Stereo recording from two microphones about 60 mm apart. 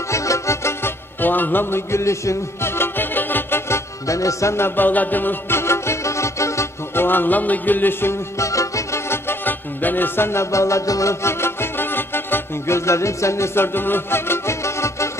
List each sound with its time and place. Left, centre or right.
0.1 s music: left
1.2 s music: left
3.7 s music: left
7.0 s music: left
8.1 s music: left
9.1 s music: left
13.7 s music: left